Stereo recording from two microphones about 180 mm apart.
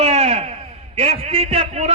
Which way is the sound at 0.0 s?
35° right (ahead or behind).